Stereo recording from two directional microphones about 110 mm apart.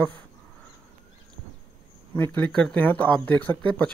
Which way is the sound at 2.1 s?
15° left (ahead or behind).